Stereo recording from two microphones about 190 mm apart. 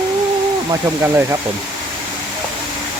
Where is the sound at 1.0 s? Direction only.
15° right (ahead or behind).